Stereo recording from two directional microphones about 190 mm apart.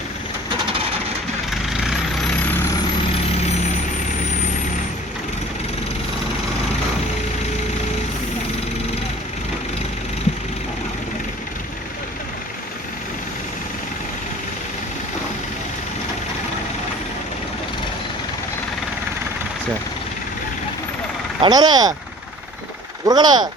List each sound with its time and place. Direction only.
1.5 s vehicle: centre (ahead or behind)
21.4 s speech: 20° right (ahead or behind)
23.0 s speech: 20° right (ahead or behind)